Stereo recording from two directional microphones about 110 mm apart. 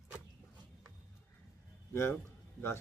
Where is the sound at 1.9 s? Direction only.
20° left (ahead or behind).